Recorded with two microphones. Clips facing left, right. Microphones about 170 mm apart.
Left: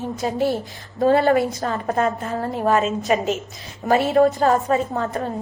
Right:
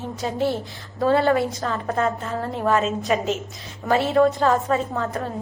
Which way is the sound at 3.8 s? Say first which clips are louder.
Left 2 dB; 50° left (ahead or behind).